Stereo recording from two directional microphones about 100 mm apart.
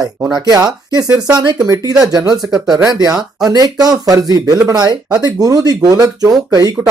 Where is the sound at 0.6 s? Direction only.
35° right (ahead or behind).